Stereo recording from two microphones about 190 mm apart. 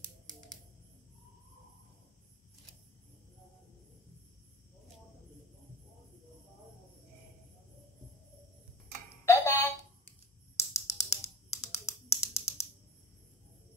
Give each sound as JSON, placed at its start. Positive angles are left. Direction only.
{"t": 9.2, "sound": "alarm clock", "side_deg": 15}
{"t": 10.6, "sound": "a sound", "side_deg": 15}
{"t": 11.6, "sound": "finger snapping", "side_deg": 15}